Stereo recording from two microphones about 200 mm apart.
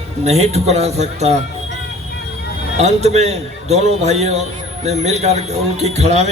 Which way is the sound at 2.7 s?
35° right (ahead or behind).